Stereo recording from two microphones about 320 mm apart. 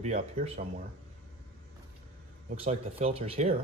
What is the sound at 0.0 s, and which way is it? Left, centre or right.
Speech, right.